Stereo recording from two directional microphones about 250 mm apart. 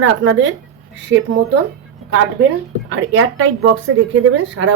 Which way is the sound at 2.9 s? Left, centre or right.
Right.